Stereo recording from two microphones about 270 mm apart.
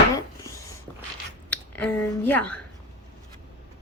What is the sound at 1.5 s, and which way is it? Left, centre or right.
Speech, centre.